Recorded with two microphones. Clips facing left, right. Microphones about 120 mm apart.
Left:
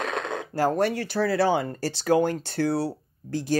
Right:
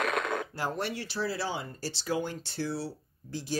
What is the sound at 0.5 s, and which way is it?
Speech, 45° left (ahead or behind).